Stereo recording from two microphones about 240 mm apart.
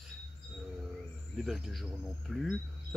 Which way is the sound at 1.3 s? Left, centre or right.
Centre.